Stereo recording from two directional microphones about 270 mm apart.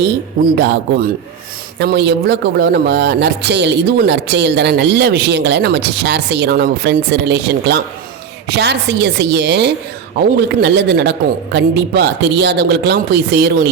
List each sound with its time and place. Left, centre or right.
0.5 s a man's voice: right